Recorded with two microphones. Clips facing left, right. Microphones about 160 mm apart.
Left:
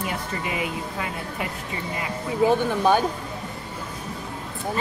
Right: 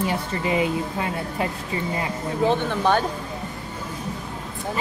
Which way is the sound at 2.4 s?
10° left (ahead or behind).